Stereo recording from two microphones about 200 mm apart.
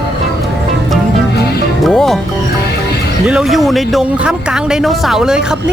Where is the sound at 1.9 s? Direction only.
Centre (ahead or behind).